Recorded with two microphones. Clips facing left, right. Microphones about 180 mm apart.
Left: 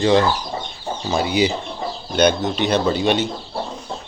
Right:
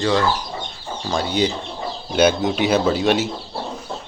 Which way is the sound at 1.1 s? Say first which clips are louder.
Left 2 dB; 10° left (ahead or behind).